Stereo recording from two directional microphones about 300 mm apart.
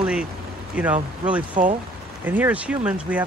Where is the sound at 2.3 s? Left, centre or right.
Centre.